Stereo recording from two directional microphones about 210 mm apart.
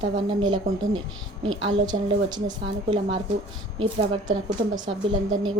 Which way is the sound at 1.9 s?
20° right (ahead or behind).